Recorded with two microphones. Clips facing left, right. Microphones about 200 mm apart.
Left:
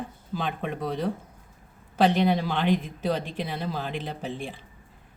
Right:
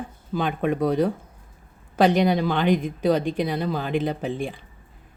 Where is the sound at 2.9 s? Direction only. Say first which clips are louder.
Right 7 dB; centre (ahead or behind).